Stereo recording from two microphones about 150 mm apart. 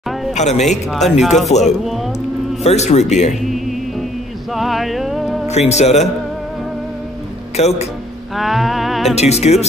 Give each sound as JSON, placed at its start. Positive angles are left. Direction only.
{"t": 0.3, "sound": "speech", "side_deg": 50}
{"t": 1.0, "sound": "music", "side_deg": 0}
{"t": 1.5, "sound": "speech", "side_deg": 50}
{"t": 3.4, "sound": "music", "side_deg": 0}
{"t": 5.5, "sound": "speech", "side_deg": 45}
{"t": 7.5, "sound": "speech", "side_deg": 45}
{"t": 8.4, "sound": "music", "side_deg": 0}
{"t": 9.1, "sound": "speech", "side_deg": 45}